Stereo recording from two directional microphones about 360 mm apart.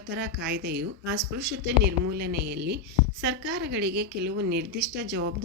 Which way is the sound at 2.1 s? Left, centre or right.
Right.